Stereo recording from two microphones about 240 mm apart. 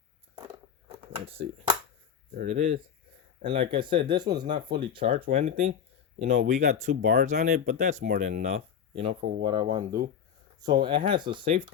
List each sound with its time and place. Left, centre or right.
2.3 s speech: right